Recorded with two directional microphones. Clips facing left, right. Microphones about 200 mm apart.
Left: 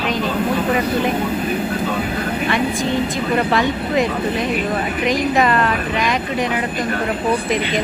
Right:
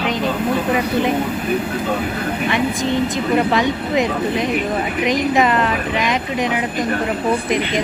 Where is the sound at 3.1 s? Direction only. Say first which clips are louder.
Right 1 dB; 20° right (ahead or behind).